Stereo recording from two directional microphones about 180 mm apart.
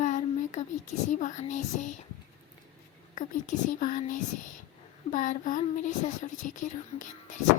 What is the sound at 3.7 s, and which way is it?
A woman's voice, 45° left (ahead or behind).